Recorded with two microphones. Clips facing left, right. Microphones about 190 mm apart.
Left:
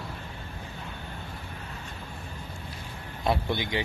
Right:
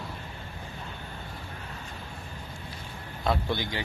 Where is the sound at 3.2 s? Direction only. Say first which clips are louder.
Left 1 dB; 20° left (ahead or behind).